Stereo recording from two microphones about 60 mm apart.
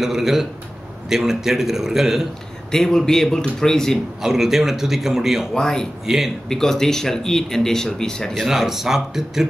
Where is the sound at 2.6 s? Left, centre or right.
Centre.